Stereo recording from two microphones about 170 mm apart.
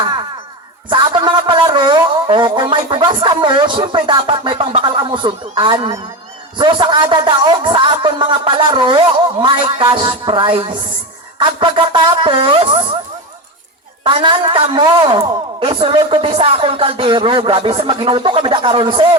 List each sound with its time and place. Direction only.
0.9 s music: 30° right (ahead or behind)
6.6 s a man's voice: 25° right (ahead or behind)
14.0 s a woman's voice: 30° right (ahead or behind)